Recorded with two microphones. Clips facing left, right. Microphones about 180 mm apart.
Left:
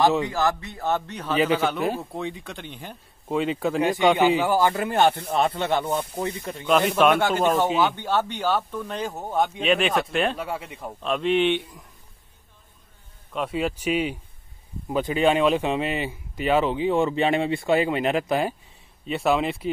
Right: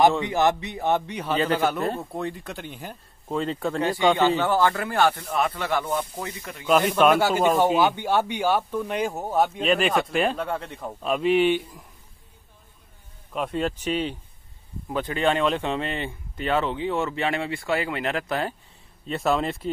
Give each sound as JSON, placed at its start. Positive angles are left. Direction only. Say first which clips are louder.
{"t": 0.2, "sound": "speech", "louder": "right 2 dB", "side_deg": -20}
{"t": 1.3, "sound": "speech", "louder": "left 2 dB", "side_deg": 10}
{"t": 1.6, "sound": "speech", "louder": "even", "side_deg": 0}
{"t": 3.8, "sound": "speech", "louder": "left 1 dB", "side_deg": 20}
{"t": 6.9, "sound": "speech", "louder": "even", "side_deg": 0}
{"t": 11.0, "sound": "speech", "louder": "right 1 dB", "side_deg": -5}
{"t": 13.3, "sound": "speech", "louder": "even", "side_deg": 0}
{"t": 19.0, "sound": "speech", "louder": "left 1 dB", "side_deg": 0}